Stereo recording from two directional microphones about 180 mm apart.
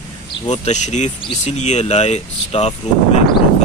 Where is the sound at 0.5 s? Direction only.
40° left (ahead or behind).